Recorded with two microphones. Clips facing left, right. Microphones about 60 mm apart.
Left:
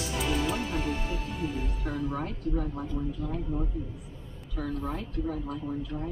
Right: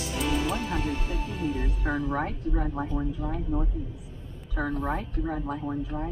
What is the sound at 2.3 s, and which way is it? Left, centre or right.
A woman's voice, right.